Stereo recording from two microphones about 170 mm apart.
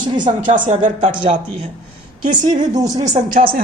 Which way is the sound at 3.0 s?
45° right (ahead or behind).